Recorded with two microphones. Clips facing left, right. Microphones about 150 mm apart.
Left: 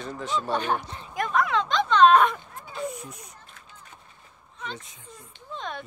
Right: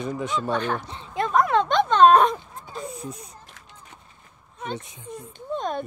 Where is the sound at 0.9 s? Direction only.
25° right (ahead or behind).